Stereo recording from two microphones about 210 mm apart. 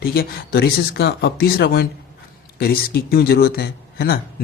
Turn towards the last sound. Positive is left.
turn(degrees=45)  # may be behind; listen again after turning